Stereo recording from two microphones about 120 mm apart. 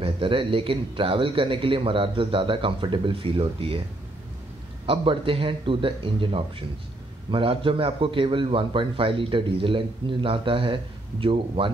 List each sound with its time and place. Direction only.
0.0 s a man's voice: 45° right (ahead or behind)
4.8 s a man's voice: 50° right (ahead or behind)